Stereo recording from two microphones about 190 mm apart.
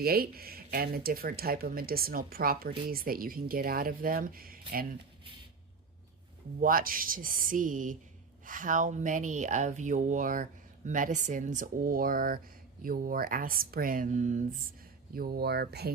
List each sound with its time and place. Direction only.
0.0 s speech: 55° right (ahead or behind)
6.6 s speech: 50° right (ahead or behind)
15.1 s speech: 50° right (ahead or behind)